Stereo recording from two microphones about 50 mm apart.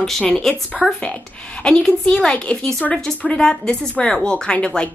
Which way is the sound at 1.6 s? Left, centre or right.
Centre.